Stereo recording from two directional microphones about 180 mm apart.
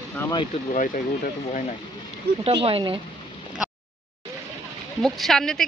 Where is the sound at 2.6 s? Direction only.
30° right (ahead or behind).